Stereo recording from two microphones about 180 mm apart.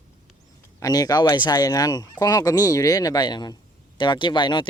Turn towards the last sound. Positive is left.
turn(degrees=25)  # may be behind; listen again after turning